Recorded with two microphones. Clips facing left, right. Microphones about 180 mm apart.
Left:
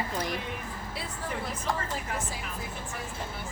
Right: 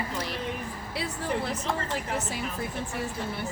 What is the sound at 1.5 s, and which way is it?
Speech, 70° right (ahead or behind).